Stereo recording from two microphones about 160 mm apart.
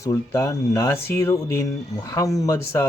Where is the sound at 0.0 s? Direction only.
20° left (ahead or behind).